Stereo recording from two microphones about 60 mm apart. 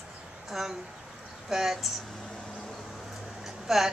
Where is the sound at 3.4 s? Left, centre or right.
Centre.